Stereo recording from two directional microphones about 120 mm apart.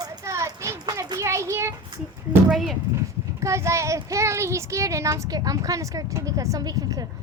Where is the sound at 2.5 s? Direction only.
Centre (ahead or behind).